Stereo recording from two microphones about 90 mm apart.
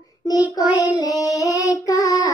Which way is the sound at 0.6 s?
40° left (ahead or behind).